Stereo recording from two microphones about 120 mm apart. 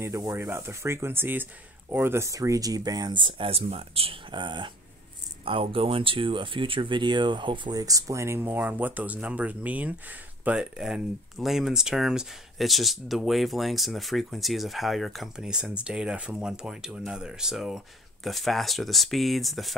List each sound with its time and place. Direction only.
0.0 s speech: 25° right (ahead or behind); by 19.7 s centre (ahead or behind)